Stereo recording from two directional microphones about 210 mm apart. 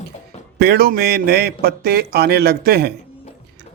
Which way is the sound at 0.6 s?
50° right (ahead or behind).